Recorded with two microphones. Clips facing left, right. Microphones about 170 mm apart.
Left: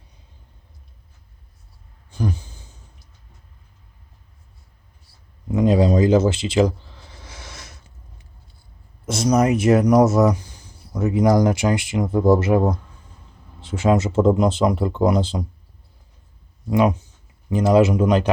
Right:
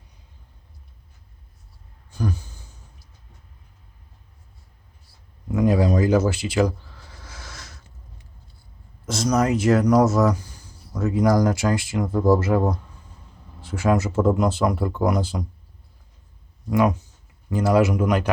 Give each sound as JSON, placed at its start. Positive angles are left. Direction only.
{"t": 2.1, "sound": "speech", "side_deg": 20}
{"t": 5.5, "sound": "a sound", "side_deg": 20}
{"t": 9.0, "sound": "speech", "side_deg": 20}
{"t": 16.6, "sound": "speech", "side_deg": 20}